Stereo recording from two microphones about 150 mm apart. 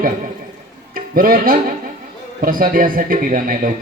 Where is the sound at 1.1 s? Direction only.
70° right (ahead or behind).